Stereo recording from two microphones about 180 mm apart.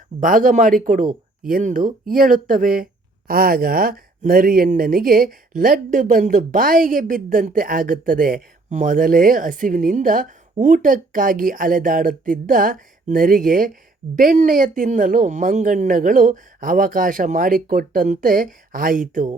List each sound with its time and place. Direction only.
0.2 s speech: 50° right (ahead or behind)